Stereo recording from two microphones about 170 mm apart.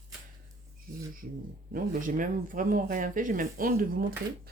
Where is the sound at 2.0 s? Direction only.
50° right (ahead or behind).